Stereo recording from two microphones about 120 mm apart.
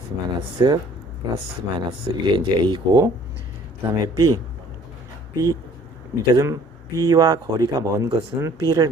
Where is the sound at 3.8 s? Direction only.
30° right (ahead or behind).